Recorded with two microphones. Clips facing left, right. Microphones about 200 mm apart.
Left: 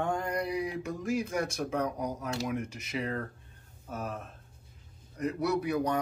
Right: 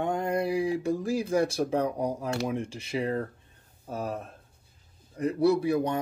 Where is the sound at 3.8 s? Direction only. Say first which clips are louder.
Right 4 dB; 30° right (ahead or behind).